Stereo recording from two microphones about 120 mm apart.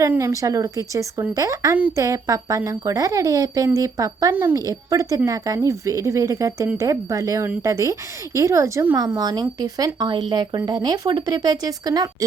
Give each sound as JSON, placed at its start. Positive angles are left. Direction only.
{"t": 0.1, "sound": "speech", "side_deg": -25}
{"t": 9.1, "sound": "speech", "side_deg": -35}